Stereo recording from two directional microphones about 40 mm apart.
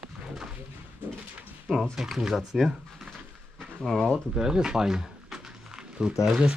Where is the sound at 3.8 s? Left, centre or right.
Centre.